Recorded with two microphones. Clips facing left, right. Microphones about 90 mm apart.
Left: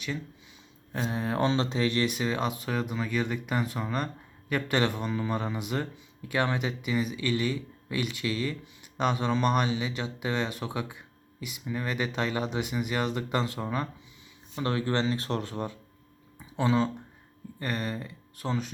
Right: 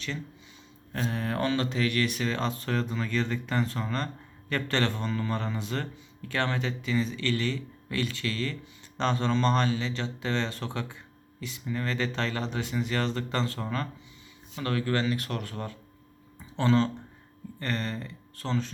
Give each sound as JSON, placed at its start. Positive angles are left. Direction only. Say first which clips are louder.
{"t": 0.9, "sound": "speech", "louder": "left 1 dB", "side_deg": 15}